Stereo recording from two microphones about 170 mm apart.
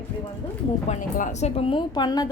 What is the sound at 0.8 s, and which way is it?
A woman's voice, 45° left (ahead or behind).